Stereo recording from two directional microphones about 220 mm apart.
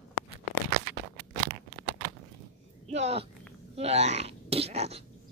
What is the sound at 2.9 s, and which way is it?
Speech, 30° right (ahead or behind).